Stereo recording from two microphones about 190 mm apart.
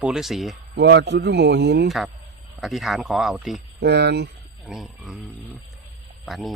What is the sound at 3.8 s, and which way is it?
Speech, 60° right (ahead or behind).